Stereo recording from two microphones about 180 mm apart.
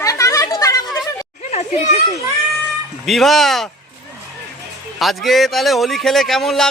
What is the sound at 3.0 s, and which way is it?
Speech, centre (ahead or behind).